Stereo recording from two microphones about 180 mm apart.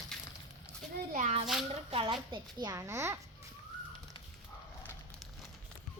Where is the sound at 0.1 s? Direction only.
5° left (ahead or behind).